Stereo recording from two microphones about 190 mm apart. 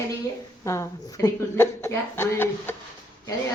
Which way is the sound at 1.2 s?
15° left (ahead or behind).